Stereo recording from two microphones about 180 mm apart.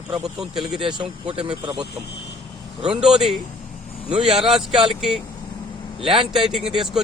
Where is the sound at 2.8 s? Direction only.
5° right (ahead or behind).